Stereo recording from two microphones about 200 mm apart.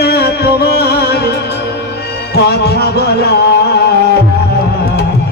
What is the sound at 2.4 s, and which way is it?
Music, 55° left (ahead or behind).